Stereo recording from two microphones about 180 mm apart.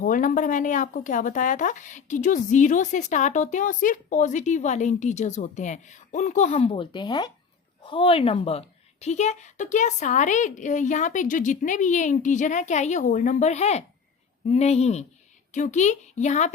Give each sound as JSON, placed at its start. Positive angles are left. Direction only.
{"t": 0.0, "sound": "speech", "side_deg": 50}
{"t": 6.7, "sound": "a woman's voice", "side_deg": 25}